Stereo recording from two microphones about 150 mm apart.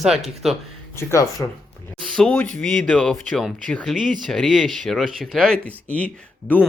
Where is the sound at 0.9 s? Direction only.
20° left (ahead or behind).